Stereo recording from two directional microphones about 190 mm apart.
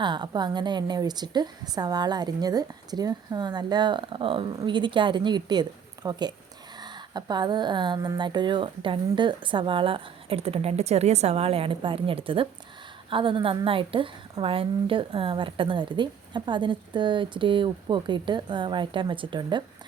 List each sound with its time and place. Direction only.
0.0 s a woman's voice: 25° right (ahead or behind)